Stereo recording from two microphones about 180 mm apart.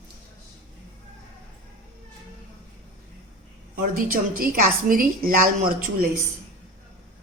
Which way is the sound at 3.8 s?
50° right (ahead or behind).